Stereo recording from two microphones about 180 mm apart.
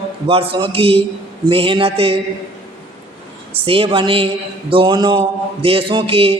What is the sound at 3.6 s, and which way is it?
A man's voice, 30° right (ahead or behind).